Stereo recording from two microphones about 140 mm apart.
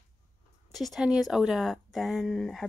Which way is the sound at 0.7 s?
Centre (ahead or behind).